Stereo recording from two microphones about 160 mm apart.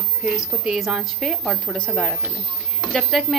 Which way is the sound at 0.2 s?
5° right (ahead or behind).